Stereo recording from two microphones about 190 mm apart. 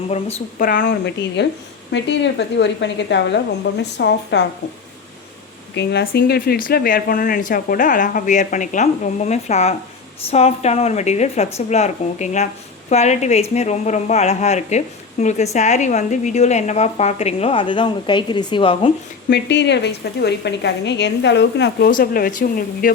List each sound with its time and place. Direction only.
0.1 s a woman's voice: 35° left (ahead or behind)
0.6 s speech: 45° left (ahead or behind); by 4.4 s 65° left (ahead or behind)
5.7 s a woman's voice: 65° left (ahead or behind); by 18.9 s 25° left (ahead or behind)
19.3 s a woman's voice: 65° left (ahead or behind)
21.8 s speech: 50° left (ahead or behind)